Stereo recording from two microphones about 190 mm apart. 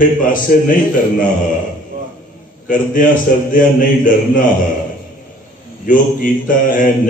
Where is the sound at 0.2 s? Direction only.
45° left (ahead or behind).